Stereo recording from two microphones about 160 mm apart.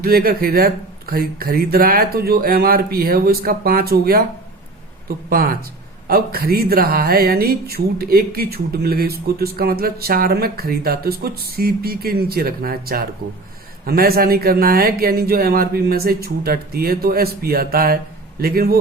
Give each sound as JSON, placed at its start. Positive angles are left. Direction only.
{"t": 0.0, "sound": "speech", "side_deg": -70}